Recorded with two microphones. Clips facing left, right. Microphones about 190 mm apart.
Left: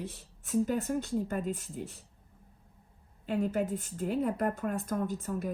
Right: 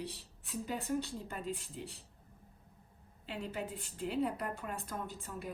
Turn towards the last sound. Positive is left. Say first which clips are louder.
# left 10 dB
turn(degrees=45)  # may be behind; listen again after turning